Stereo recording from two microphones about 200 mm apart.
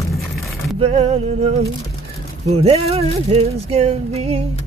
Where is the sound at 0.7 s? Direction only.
30° right (ahead or behind).